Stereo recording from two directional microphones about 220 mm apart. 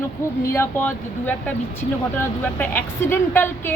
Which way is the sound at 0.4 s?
15° left (ahead or behind).